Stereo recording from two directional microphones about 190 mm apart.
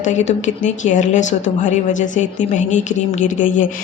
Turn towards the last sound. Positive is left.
turn(degrees=40)  # may be behind; listen again after turning